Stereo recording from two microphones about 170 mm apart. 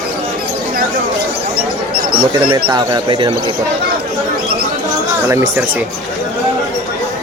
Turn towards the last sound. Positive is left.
turn(degrees=-15)  # may be behind; listen again after turning